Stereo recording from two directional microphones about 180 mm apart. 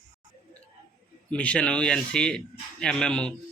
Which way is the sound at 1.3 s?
5° left (ahead or behind).